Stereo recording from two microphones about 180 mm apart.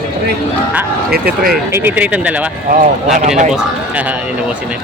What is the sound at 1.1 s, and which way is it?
Speech, 60° right (ahead or behind).